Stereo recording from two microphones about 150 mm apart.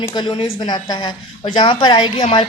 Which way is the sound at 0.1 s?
30° left (ahead or behind).